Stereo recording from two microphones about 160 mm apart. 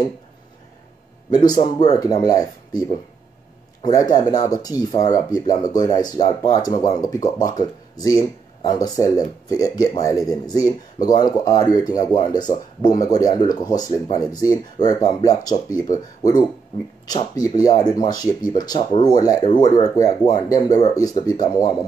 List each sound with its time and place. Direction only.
1.3 s speech: 25° left (ahead or behind)
3.8 s speech: 25° left (ahead or behind)